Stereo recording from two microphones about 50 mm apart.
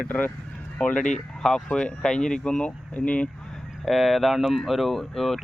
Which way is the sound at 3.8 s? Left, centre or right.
Centre.